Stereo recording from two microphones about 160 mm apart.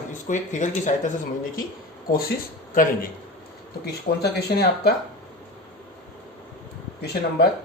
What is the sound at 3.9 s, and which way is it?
Speech, 85° left.